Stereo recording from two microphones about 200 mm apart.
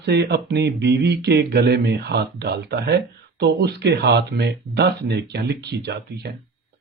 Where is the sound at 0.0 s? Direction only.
55° right (ahead or behind).